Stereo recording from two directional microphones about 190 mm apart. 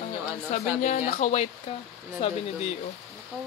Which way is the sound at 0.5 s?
40° left (ahead or behind).